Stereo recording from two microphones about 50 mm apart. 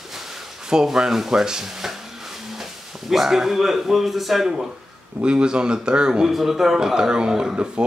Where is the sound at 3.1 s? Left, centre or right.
Centre.